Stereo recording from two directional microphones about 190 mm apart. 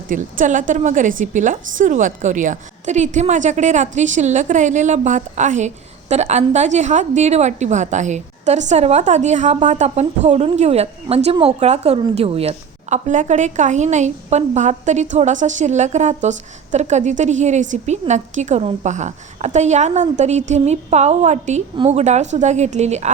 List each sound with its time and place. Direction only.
0.1 s a woman's voice: 45° right (ahead or behind)